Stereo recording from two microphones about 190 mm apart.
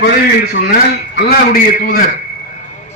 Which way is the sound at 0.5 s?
55° left (ahead or behind).